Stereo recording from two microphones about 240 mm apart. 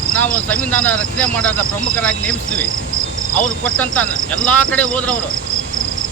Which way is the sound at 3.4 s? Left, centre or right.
Centre.